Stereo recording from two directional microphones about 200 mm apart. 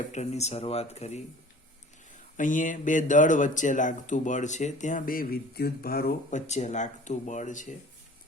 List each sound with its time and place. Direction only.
0.0 s speech: 35° left (ahead or behind)
2.3 s speech: 40° left (ahead or behind)